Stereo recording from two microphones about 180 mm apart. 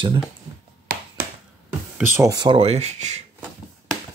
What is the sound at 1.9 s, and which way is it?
Speech, 15° right (ahead or behind).